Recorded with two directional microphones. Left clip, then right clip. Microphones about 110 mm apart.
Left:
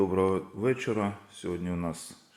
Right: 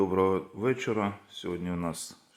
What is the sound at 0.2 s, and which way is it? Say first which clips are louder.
A man's voice: right 1 dB; 20° right (ahead or behind).